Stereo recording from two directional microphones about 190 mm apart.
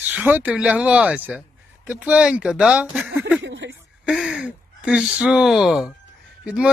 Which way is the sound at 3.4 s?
75° right (ahead or behind).